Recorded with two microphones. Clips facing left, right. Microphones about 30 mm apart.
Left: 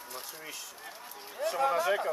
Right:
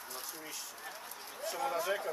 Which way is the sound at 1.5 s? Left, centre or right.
Left.